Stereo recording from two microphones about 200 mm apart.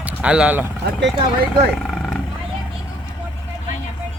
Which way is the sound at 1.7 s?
Centre (ahead or behind).